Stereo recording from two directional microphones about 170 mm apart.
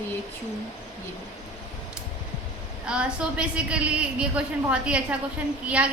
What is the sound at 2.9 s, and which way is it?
A woman's voice, 5° right (ahead or behind).